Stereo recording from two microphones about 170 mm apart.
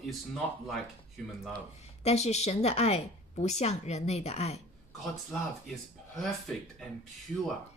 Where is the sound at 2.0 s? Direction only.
40° left (ahead or behind).